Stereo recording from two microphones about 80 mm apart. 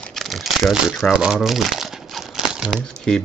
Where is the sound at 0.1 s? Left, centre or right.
Centre.